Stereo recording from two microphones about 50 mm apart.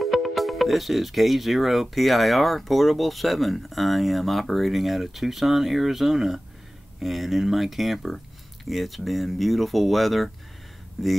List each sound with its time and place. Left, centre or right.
0.0 s speech: centre